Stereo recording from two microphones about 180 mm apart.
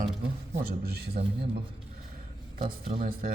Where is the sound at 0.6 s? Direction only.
60° right (ahead or behind).